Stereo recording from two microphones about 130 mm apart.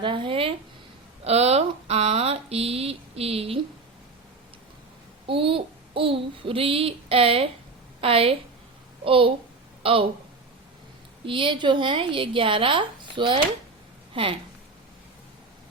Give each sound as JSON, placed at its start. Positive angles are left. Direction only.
{"t": 0.0, "sound": "a woman's voice", "side_deg": -40}
{"t": 1.2, "sound": "speech", "side_deg": -55}
{"t": 5.2, "sound": "speech", "side_deg": -45}
{"t": 11.3, "sound": "a woman's voice", "side_deg": -40}